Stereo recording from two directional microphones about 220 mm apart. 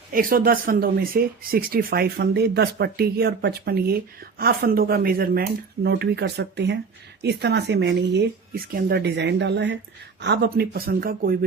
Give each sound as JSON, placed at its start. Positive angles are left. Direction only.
{"t": 0.1, "sound": "speech", "side_deg": -40}